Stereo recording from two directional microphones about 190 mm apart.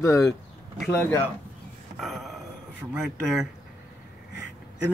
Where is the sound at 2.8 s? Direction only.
5° right (ahead or behind).